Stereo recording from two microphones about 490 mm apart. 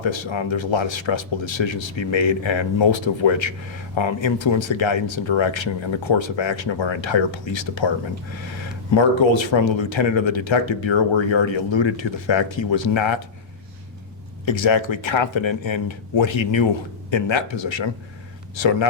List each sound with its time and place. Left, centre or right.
0.0 s speech: left
14.4 s speech: left